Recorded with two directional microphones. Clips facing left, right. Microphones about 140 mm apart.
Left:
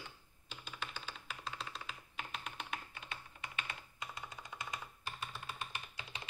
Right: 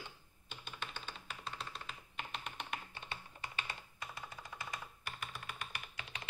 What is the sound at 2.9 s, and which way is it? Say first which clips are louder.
Typing: right 1 dB; 30° right (ahead or behind).